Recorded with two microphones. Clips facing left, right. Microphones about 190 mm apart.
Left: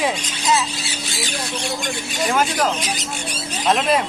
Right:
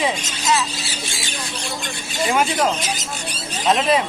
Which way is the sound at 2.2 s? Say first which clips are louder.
Right 1 dB; 10° right (ahead or behind).